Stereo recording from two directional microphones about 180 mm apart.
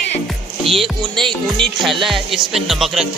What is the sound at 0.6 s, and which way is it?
Music, centre (ahead or behind).